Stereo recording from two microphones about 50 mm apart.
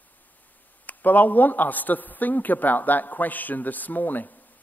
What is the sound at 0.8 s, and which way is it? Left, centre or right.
A man's voice, left.